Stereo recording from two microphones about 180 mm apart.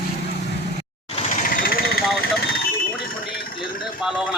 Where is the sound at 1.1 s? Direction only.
45° left (ahead or behind).